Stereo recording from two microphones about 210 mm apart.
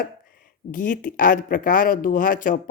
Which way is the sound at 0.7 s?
40° left (ahead or behind).